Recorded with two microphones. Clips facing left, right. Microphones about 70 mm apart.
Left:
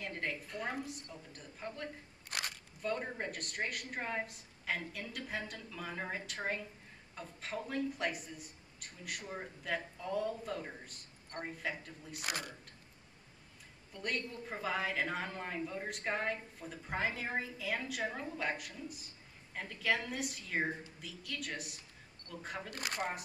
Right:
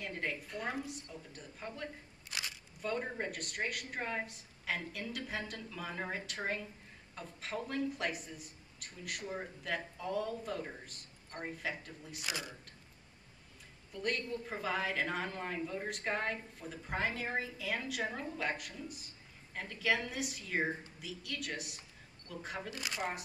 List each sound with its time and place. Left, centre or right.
0.0 s a woman's voice: centre
2.2 s single-lens reflex camera: left
2.8 s a woman's voice: centre
12.2 s speech: left
13.9 s a woman's voice: centre
22.8 s speech: left